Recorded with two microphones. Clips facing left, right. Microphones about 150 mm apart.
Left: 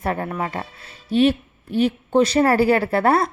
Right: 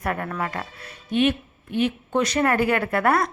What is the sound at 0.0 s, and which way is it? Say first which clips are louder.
A woman's voice: left 3 dB; 30° left (ahead or behind).